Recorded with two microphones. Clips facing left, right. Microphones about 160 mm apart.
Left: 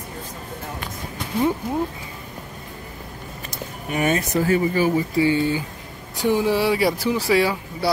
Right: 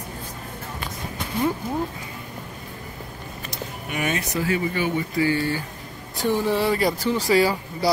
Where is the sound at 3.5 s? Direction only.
40° left (ahead or behind).